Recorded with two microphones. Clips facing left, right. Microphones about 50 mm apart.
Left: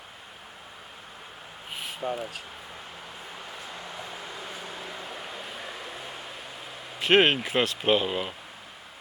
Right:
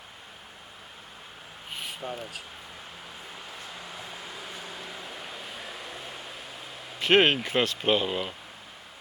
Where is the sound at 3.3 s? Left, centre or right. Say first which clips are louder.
Left 2 dB; centre.